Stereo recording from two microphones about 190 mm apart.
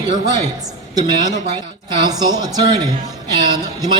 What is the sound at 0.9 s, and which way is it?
A man's voice, 20° right (ahead or behind).